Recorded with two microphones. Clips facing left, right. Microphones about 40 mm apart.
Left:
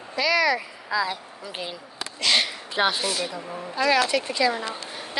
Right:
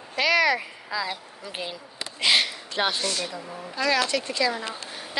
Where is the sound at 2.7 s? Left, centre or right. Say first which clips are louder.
Left 3 dB; centre.